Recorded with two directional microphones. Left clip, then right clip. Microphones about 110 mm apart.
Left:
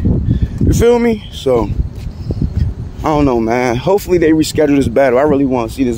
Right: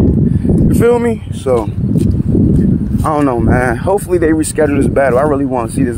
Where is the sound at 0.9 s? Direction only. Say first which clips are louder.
Left 1 dB; 30° left (ahead or behind).